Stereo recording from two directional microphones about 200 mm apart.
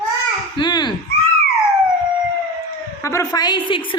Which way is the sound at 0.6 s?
20° left (ahead or behind).